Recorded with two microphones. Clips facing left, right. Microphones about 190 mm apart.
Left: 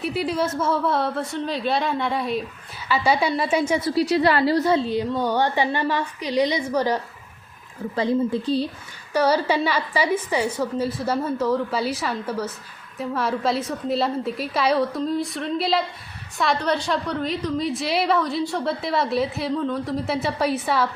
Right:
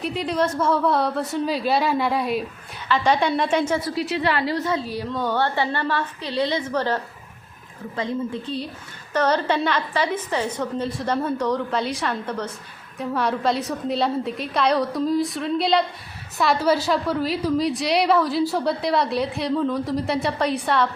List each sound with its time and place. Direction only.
0.0 s a woman's voice: 5° left (ahead or behind)
2.9 s a woman's voice: 10° left (ahead or behind)
3.9 s a woman's voice: 40° left (ahead or behind); by 7.0 s 15° left (ahead or behind)
7.9 s speech: 35° left (ahead or behind)
9.1 s a woman's voice: 10° left (ahead or behind)